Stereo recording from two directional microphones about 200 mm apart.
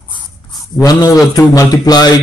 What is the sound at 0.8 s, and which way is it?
Mantra, 20° left (ahead or behind).